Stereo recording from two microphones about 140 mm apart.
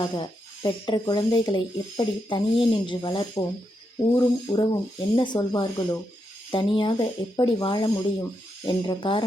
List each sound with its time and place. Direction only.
0.0 s speech: 30° left (ahead or behind)